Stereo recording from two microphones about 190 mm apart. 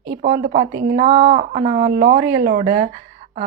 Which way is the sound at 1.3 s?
30° right (ahead or behind).